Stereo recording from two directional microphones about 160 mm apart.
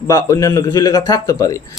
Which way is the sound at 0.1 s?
20° left (ahead or behind).